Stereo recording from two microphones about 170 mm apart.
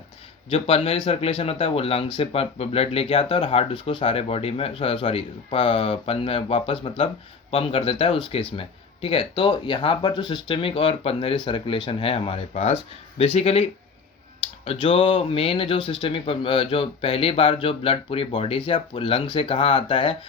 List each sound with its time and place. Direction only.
0.5 s speech: 35° left (ahead or behind)